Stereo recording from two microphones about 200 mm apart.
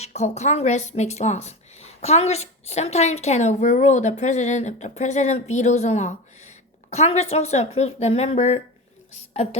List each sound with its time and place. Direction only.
0.0 s a woman's voice: 35° left (ahead or behind)